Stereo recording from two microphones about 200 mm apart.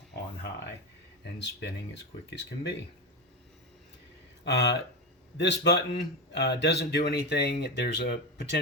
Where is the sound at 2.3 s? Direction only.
60° left (ahead or behind).